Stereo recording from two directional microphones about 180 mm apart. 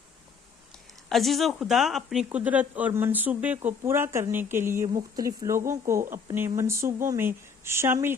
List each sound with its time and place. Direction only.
1.1 s speech: centre (ahead or behind)